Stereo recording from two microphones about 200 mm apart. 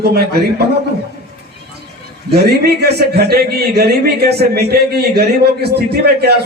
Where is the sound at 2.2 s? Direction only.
55° right (ahead or behind).